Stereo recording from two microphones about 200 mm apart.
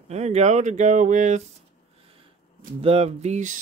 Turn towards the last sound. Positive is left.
turn(degrees=-35)  # may be behind; listen again after turning